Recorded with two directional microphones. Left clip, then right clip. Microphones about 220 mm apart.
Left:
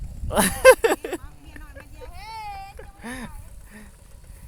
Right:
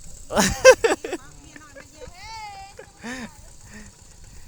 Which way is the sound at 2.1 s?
35° left (ahead or behind).